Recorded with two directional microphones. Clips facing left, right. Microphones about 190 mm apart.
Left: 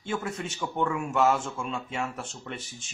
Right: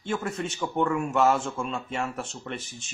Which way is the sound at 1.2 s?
Centre (ahead or behind).